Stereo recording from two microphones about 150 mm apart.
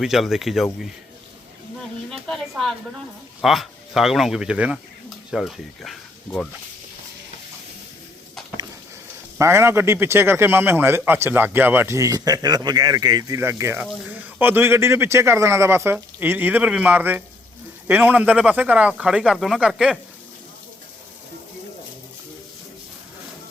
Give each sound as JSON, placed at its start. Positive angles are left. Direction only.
{"t": 0.0, "sound": "speech", "side_deg": 0}
{"t": 2.2, "sound": "speech", "side_deg": 5}
{"t": 9.4, "sound": "speech", "side_deg": -15}